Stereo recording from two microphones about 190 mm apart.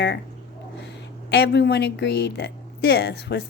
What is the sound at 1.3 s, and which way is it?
Speech, 60° left (ahead or behind).